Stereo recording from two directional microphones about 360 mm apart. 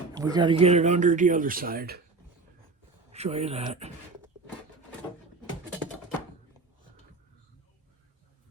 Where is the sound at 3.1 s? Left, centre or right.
Centre.